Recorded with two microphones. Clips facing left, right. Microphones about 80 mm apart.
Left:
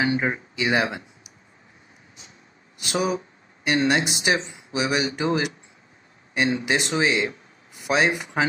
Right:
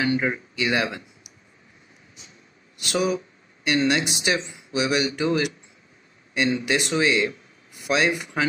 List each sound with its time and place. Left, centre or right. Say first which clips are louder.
0.0 s speech: even; left
2.8 s a man's voice: right 1 dB; left